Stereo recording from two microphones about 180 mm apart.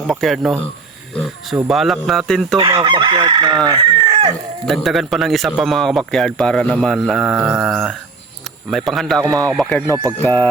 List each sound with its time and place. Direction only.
0.1 s speech: centre (ahead or behind)
1.6 s speech: centre (ahead or behind)
2.6 s chicken: 30° right (ahead or behind)
4.6 s speech: centre (ahead or behind)
9.8 s speech: 15° right (ahead or behind)
10.1 s speech: 10° left (ahead or behind)